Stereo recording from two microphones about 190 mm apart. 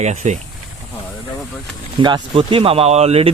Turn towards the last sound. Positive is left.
turn(degrees=-35)  # may be behind; listen again after turning